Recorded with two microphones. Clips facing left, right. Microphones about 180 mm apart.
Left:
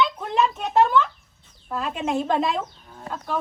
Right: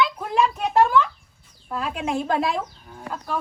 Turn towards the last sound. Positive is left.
turn(degrees=0)  # may be behind; listen again after turning